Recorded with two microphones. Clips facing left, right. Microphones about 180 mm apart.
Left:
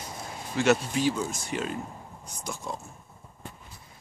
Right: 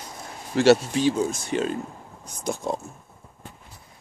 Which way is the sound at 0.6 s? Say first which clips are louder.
Right 6 dB; 30° right (ahead or behind).